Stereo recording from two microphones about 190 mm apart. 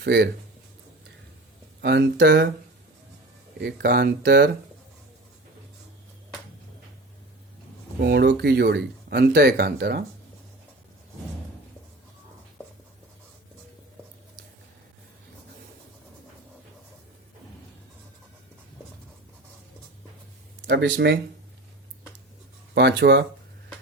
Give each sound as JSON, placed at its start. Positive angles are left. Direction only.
{"t": 0.0, "sound": "speech", "side_deg": -60}
{"t": 1.8, "sound": "speech", "side_deg": -60}
{"t": 3.6, "sound": "speech", "side_deg": -60}
{"t": 7.9, "sound": "speech", "side_deg": -55}
{"t": 20.6, "sound": "speech", "side_deg": -70}
{"t": 22.7, "sound": "speech", "side_deg": -60}